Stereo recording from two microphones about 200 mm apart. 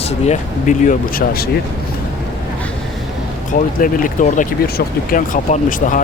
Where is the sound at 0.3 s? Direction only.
40° left (ahead or behind).